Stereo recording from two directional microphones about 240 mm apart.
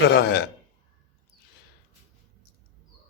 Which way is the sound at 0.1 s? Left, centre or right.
Left.